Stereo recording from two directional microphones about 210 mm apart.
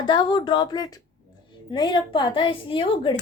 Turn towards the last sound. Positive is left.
turn(degrees=25)  # may be behind; listen again after turning